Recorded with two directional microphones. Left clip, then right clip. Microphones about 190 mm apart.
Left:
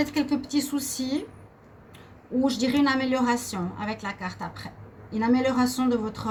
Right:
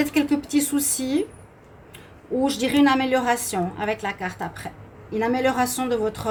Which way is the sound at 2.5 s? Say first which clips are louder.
Right 5 dB; 45° right (ahead or behind).